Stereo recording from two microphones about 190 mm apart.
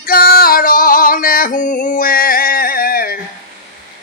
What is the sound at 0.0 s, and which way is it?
Female singing, 50° left (ahead or behind).